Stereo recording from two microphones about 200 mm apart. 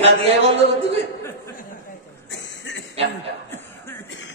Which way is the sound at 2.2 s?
65° left (ahead or behind).